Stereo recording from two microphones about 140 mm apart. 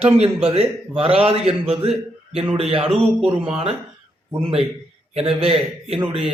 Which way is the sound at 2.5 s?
45° right (ahead or behind).